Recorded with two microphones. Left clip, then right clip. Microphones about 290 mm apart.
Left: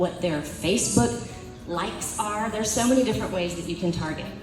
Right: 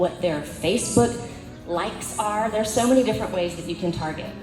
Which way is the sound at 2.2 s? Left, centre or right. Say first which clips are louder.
Right 4 dB; right.